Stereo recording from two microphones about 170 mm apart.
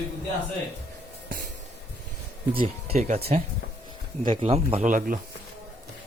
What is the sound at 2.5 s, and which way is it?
Speech, 35° right (ahead or behind).